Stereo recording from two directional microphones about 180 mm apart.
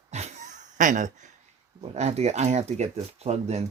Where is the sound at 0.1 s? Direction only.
40° right (ahead or behind).